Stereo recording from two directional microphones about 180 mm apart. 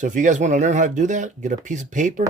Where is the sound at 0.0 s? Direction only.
45° right (ahead or behind).